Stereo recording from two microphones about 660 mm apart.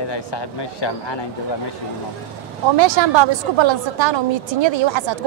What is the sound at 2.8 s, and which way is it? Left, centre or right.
A woman's voice, right.